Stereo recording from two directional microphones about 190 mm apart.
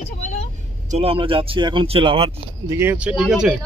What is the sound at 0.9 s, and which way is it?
Speech, 30° right (ahead or behind).